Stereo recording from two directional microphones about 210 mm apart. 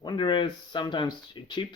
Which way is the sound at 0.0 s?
20° left (ahead or behind).